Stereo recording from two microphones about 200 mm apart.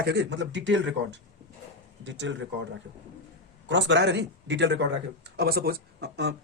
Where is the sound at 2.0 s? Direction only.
65° right (ahead or behind).